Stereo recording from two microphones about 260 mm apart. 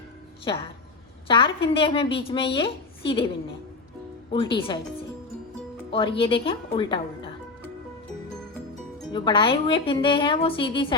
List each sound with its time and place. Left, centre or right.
0.5 s a woman's voice: centre
4.5 s a woman's voice: centre
5.9 s a woman's voice: centre
9.1 s a woman's voice: centre